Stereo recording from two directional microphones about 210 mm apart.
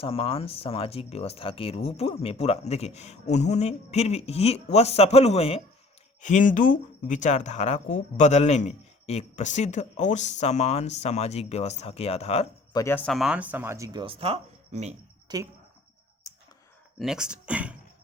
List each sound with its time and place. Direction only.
0.0 s speech: 25° left (ahead or behind)
12.7 s speech: 10° left (ahead or behind); by 14.9 s 30° right (ahead or behind)
15.3 s speech: 20° right (ahead or behind)
17.0 s speech: 5° right (ahead or behind)